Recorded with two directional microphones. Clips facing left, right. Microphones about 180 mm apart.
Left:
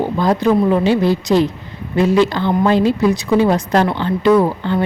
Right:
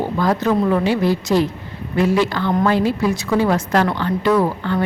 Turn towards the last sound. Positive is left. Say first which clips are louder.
# left 4 dB
turn(degrees=20)  # may be behind; listen again after turning